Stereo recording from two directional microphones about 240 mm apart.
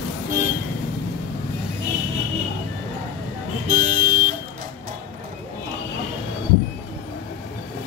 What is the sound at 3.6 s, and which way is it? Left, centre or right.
Vehicle, right.